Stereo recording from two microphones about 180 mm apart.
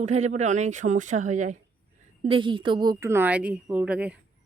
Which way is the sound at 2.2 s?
30° right (ahead or behind).